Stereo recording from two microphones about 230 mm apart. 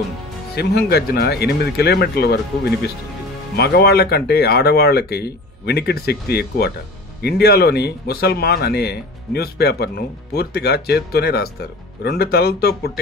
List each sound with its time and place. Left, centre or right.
0.6 s a man's voice: left
3.5 s a man's voice: left